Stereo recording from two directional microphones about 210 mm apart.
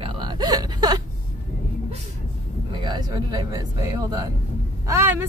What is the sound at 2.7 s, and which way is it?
Speech, 20° right (ahead or behind).